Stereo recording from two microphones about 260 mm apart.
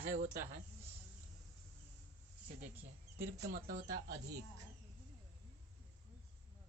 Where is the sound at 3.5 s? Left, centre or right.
Right.